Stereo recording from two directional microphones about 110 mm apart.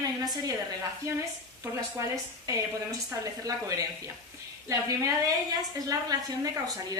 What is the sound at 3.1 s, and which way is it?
Speech, 30° right (ahead or behind).